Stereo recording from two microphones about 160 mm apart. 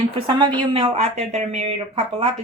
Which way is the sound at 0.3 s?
25° right (ahead or behind).